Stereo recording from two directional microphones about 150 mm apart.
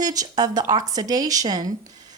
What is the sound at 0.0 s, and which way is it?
A woman's voice, 25° right (ahead or behind).